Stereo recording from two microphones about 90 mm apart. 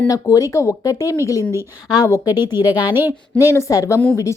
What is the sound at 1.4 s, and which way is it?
Speech, 30° right (ahead or behind).